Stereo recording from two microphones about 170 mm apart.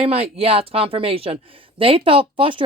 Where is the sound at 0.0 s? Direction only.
35° right (ahead or behind).